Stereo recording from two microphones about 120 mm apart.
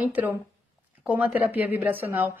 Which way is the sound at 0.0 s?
15° right (ahead or behind).